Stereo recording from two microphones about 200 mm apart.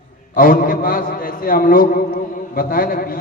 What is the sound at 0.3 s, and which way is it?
A man's voice, 45° left (ahead or behind).